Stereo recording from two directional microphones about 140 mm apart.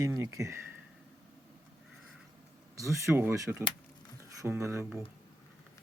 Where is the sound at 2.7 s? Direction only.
20° right (ahead or behind).